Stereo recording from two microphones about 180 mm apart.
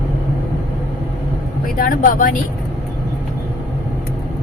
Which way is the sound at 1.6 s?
50° left (ahead or behind).